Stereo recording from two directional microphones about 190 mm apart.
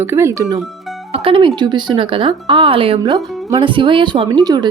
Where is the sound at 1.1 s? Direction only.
30° right (ahead or behind).